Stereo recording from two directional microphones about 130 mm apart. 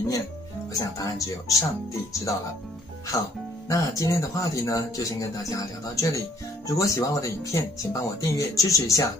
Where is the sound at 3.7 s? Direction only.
25° left (ahead or behind).